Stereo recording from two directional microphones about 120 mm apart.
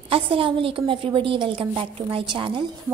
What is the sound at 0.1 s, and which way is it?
A woman's voice, 50° right (ahead or behind).